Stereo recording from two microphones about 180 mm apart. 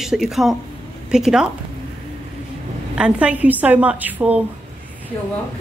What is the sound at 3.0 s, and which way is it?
A woman's voice, 5° right (ahead or behind).